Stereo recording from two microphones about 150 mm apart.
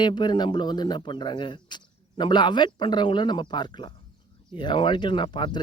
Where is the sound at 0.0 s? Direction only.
30° left (ahead or behind).